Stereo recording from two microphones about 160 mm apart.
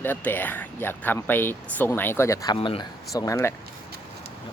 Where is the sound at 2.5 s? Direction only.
35° left (ahead or behind).